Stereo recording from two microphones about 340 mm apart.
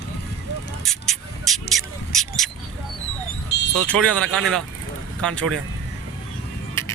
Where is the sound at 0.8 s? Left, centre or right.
Centre.